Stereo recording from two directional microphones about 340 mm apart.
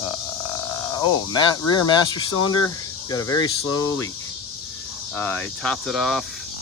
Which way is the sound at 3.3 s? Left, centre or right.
Centre.